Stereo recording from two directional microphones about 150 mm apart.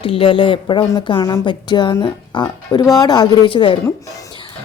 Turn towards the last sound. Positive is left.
turn(degrees=35)  # may be behind; listen again after turning